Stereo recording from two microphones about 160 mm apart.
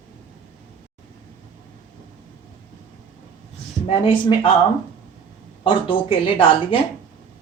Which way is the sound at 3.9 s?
35° left (ahead or behind).